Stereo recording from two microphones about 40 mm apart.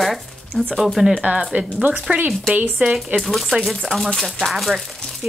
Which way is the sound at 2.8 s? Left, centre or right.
Right.